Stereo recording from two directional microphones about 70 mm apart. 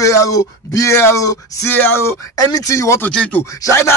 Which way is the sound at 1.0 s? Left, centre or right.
Left.